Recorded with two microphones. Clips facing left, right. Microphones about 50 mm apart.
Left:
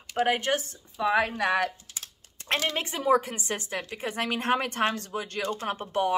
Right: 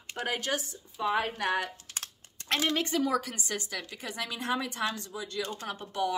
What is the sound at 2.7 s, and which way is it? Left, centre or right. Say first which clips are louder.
A woman's voice: left 4 dB; left.